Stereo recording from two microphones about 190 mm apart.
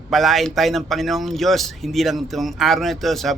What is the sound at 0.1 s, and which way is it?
Speech, centre (ahead or behind).